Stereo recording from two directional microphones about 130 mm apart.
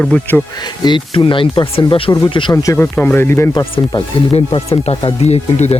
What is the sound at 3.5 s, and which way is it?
Speech, 30° left (ahead or behind).